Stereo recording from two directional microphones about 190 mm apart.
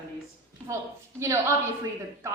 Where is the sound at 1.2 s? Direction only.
15° right (ahead or behind).